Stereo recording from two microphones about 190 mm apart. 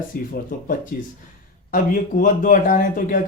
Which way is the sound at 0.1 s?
50° left (ahead or behind).